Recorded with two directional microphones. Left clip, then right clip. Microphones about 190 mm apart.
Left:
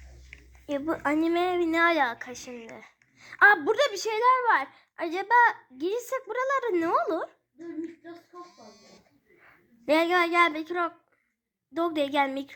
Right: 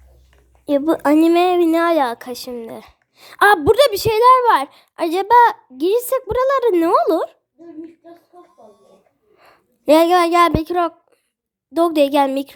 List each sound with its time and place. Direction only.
0.9 s a woman's voice: 65° right (ahead or behind)
9.4 s a woman's voice: 60° right (ahead or behind)